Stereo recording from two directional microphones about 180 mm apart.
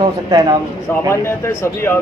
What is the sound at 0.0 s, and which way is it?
Speech, 25° right (ahead or behind).